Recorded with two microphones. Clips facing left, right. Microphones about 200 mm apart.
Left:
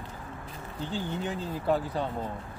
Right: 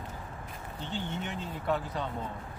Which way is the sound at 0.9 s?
35° left (ahead or behind).